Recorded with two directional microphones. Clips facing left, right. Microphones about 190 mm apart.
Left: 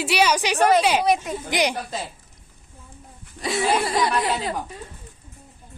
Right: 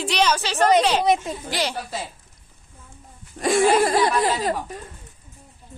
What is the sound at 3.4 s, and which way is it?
Speech, 45° right (ahead or behind).